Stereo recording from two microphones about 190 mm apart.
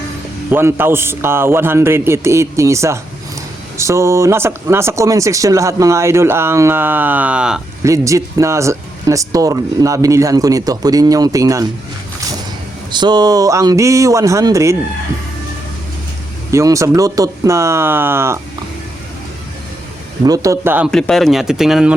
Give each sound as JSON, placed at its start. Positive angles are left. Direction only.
{"t": 0.5, "sound": "speech", "side_deg": -10}
{"t": 7.9, "sound": "speech", "side_deg": -15}
{"t": 12.9, "sound": "speech", "side_deg": -25}
{"t": 16.5, "sound": "speech", "side_deg": -15}
{"t": 20.2, "sound": "speech", "side_deg": -20}
{"t": 20.9, "sound": "speech", "side_deg": 0}